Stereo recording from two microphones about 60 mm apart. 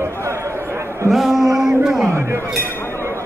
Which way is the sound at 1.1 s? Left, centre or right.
Centre.